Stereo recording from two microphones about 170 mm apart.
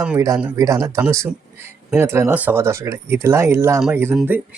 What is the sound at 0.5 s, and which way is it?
Speech, 20° right (ahead or behind).